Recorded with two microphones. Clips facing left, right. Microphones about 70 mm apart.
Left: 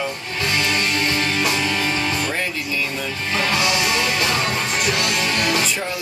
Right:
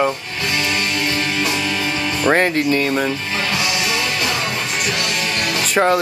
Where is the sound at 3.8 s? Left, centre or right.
Left.